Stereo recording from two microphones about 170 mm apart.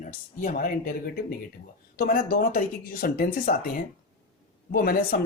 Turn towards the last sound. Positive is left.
turn(degrees=60)  # may be behind; listen again after turning